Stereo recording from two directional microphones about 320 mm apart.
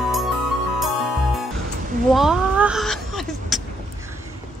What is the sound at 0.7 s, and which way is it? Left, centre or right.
Music, centre.